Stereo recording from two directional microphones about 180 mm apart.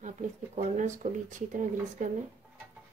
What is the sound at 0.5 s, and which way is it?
Speech, 40° right (ahead or behind).